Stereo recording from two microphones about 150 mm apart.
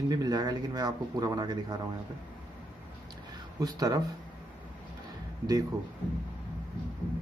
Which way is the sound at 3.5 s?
25° right (ahead or behind).